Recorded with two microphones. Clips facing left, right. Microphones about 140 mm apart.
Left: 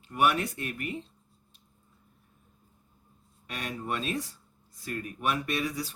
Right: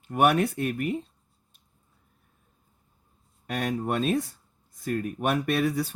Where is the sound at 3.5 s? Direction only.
50° right (ahead or behind).